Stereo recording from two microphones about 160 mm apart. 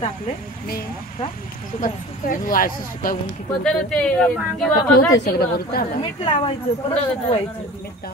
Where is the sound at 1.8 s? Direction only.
55° left (ahead or behind).